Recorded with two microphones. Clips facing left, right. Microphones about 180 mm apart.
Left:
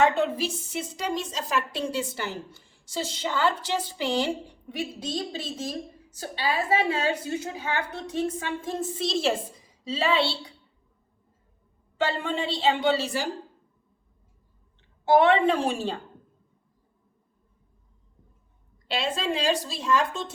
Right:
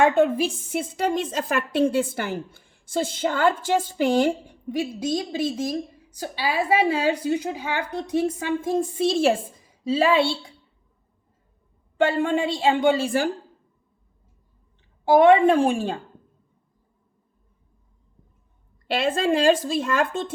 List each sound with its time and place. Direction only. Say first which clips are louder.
0.0 s a woman's voice: right 4 dB; 50° right (ahead or behind)
4.8 s a woman's voice: right 5 dB; 10° right (ahead or behind)
9.0 s a woman's voice: right 5 dB; 50° right (ahead or behind)
11.9 s a woman's voice: right 6 dB; 50° right (ahead or behind)
15.4 s a woman's voice: right 5 dB; 50° right (ahead or behind)
18.9 s a woman's voice: right 6 dB; 55° right (ahead or behind)